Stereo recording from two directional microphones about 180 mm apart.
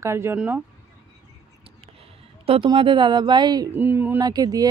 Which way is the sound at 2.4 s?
30° right (ahead or behind).